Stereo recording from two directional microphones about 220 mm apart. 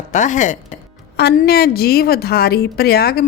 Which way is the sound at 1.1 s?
45° left (ahead or behind).